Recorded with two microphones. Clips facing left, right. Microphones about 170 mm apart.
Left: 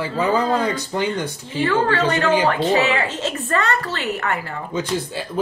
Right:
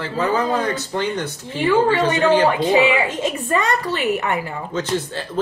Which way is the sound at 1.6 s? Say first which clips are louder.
Right 2 dB; 15° right (ahead or behind).